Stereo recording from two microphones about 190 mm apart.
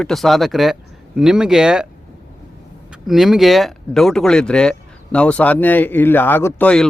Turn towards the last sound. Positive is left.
turn(degrees=5)  # may be behind; listen again after turning